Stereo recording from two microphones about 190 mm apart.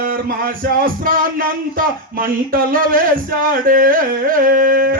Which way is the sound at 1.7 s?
45° right (ahead or behind).